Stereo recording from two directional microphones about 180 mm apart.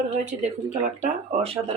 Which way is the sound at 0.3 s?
40° right (ahead or behind).